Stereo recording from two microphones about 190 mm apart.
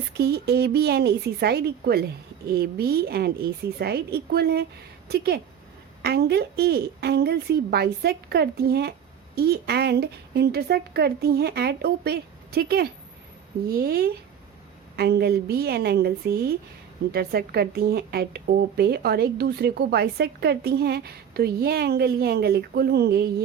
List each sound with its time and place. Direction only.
0.2 s a woman's voice: 55° right (ahead or behind)